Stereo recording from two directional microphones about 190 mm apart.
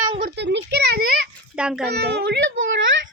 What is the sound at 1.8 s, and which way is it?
Speech, 60° right (ahead or behind).